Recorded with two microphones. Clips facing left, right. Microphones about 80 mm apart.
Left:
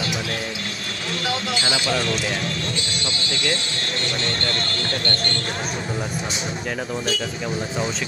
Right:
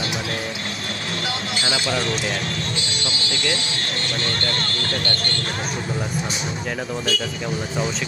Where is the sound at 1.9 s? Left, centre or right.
Right.